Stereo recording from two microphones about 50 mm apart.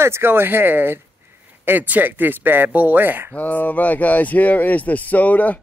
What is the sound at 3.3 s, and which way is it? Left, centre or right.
Speech, left.